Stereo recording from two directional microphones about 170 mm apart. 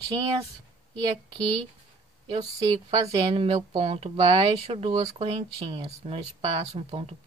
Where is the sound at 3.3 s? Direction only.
30° right (ahead or behind).